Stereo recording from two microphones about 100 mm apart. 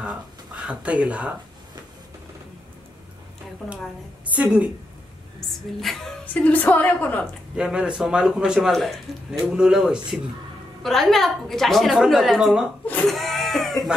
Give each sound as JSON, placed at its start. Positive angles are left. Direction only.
{"t": 0.7, "sound": "a man's voice", "side_deg": -10}
{"t": 4.3, "sound": "a man's voice", "side_deg": -15}
{"t": 5.5, "sound": "a man's voice", "side_deg": 0}
{"t": 6.2, "sound": "a woman's voice", "side_deg": 15}
{"t": 7.5, "sound": "a man's voice", "side_deg": -10}
{"t": 13.0, "sound": "a sound", "side_deg": 0}